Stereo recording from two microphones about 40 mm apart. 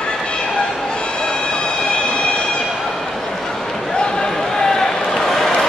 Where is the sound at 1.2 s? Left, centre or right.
Left.